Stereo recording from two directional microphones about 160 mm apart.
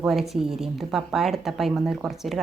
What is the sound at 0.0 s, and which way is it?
Speech, centre (ahead or behind).